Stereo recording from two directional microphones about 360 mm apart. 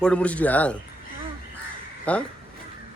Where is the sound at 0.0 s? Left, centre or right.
Centre.